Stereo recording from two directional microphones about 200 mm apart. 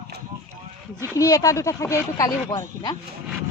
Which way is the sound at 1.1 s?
15° left (ahead or behind).